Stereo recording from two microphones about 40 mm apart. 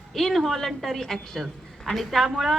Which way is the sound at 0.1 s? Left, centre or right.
Centre.